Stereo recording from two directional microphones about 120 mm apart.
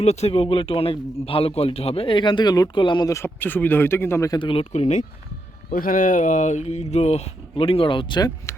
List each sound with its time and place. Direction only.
0.0 s a man's voice: 65° left (ahead or behind); by 3.1 s 40° left (ahead or behind)
3.1 s speech: 20° left (ahead or behind)
4.3 s a man's voice: 45° left (ahead or behind)
4.7 s speech: 70° left (ahead or behind)
6.1 s speech: 90° left; by 8.3 s 40° left (ahead or behind)